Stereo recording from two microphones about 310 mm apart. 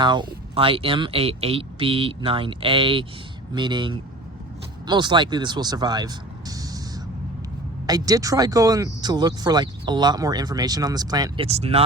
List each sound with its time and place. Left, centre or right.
0.0 s speech: centre
7.9 s speech: centre